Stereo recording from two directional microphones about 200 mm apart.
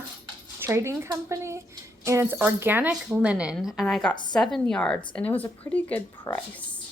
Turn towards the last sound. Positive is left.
turn(degrees=15)  # may be behind; listen again after turning